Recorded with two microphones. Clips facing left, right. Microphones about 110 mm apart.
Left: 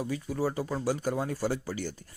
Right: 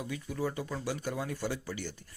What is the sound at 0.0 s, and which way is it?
Speech, 35° left (ahead or behind).